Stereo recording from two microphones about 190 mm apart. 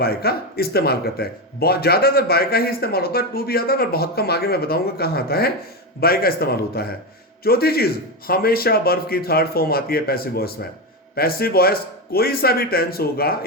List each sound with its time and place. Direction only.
0.0 s speech: 55° left (ahead or behind)